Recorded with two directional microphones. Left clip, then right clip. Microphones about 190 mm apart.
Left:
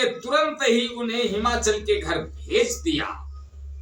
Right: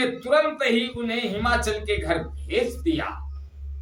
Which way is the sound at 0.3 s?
10° right (ahead or behind).